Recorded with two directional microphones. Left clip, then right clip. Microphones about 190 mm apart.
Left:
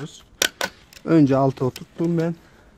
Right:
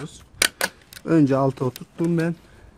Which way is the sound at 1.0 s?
30° left (ahead or behind).